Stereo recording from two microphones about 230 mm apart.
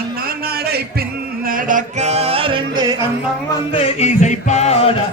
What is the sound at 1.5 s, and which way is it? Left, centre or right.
Music, right.